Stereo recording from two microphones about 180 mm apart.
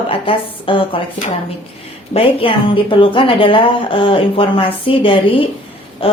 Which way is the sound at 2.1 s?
30° left (ahead or behind).